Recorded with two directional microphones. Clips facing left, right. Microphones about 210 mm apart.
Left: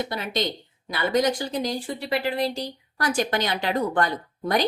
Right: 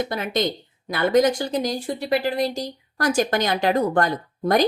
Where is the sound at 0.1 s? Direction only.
50° right (ahead or behind).